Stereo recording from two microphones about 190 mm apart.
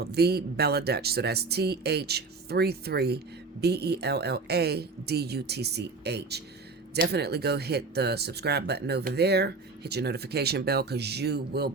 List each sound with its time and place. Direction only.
0.0 s speech: 55° right (ahead or behind)